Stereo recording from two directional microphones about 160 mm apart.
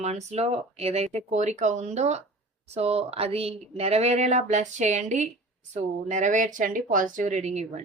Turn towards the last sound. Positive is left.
turn(degrees=-45)  # may be behind; listen again after turning